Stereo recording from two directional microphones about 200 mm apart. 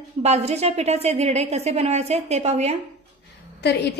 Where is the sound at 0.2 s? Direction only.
30° right (ahead or behind).